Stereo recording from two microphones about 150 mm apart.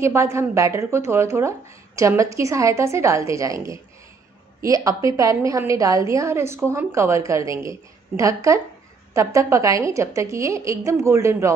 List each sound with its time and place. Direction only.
0.0 s a woman's voice: 20° right (ahead or behind)